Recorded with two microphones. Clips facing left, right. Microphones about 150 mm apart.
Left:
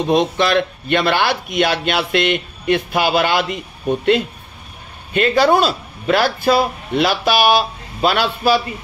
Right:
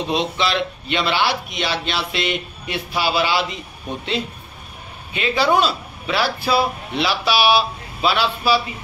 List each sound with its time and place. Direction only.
0.0 s a man's voice: 50° left (ahead or behind)
5.1 s a man's voice: 45° left (ahead or behind)